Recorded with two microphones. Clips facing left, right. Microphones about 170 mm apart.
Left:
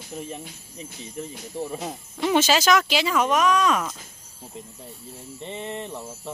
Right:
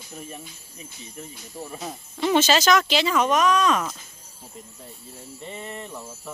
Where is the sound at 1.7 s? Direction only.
20° left (ahead or behind).